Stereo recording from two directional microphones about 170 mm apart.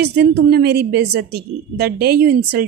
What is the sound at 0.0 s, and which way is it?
A woman's voice, 75° right (ahead or behind).